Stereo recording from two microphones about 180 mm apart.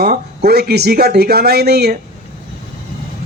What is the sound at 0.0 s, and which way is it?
Speech, 60° right (ahead or behind).